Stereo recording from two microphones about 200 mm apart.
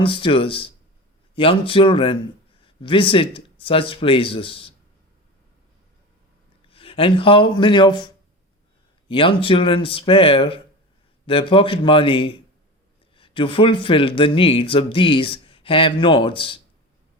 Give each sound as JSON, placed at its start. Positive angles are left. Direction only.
{"t": 0.0, "sound": "speech", "side_deg": 25}
{"t": 6.7, "sound": "speech", "side_deg": 25}